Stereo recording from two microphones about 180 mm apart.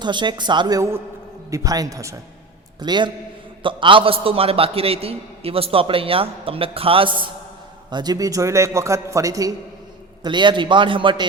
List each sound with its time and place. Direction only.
0.0 s a woman's voice: 25° right (ahead or behind)